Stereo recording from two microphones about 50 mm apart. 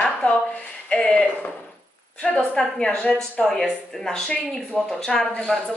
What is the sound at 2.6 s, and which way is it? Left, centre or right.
Speech, centre.